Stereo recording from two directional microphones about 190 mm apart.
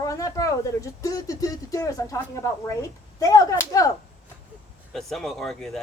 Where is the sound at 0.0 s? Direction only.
15° left (ahead or behind).